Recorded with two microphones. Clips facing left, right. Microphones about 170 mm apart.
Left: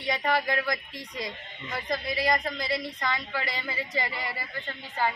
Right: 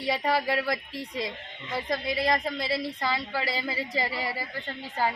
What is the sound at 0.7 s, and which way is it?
A man's voice, 30° right (ahead or behind).